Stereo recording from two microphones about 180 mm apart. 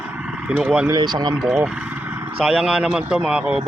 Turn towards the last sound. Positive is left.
turn(degrees=-5)  # may be behind; listen again after turning